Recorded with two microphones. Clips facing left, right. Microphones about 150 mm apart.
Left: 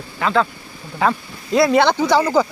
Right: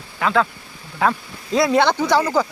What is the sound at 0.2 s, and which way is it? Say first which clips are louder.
Speech: left 1 dB; 5° right (ahead or behind).